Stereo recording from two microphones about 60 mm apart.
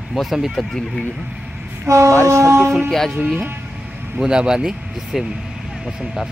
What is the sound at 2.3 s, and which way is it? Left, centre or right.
Speech, right.